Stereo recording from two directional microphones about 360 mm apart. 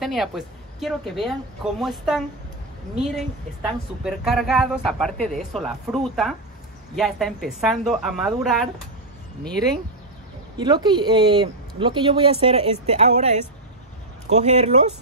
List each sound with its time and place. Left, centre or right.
0.0 s speech: centre
4.0 s speech: centre
10.6 s speech: centre